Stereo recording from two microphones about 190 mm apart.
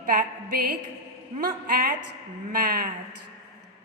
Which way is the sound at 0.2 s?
55° right (ahead or behind).